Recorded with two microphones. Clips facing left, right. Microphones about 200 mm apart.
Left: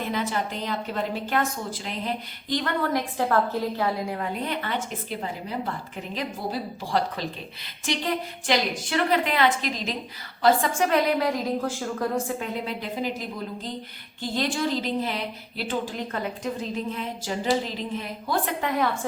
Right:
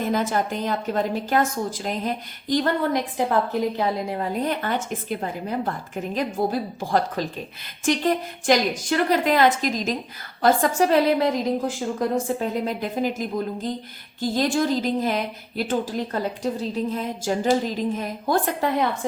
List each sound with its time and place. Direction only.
0.0 s a woman's voice: 45° right (ahead or behind)
2.9 s a woman's voice: 15° right (ahead or behind)
4.2 s a woman's voice: 45° right (ahead or behind); by 12.0 s 20° right (ahead or behind)
12.4 s a woman's voice: 45° right (ahead or behind)